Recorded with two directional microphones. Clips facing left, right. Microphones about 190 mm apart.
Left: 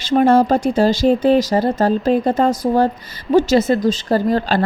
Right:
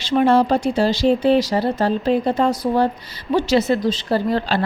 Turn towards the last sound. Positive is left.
turn(degrees=45)  # may be behind; listen again after turning